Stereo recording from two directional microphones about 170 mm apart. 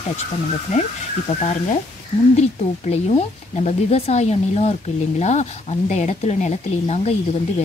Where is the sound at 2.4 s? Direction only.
40° left (ahead or behind).